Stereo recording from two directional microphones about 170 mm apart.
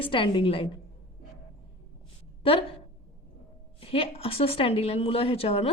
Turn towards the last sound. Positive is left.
turn(degrees=35)  # may be behind; listen again after turning